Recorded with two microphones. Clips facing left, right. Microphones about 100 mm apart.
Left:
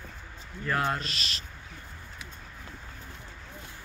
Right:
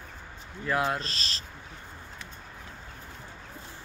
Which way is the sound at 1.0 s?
35° right (ahead or behind).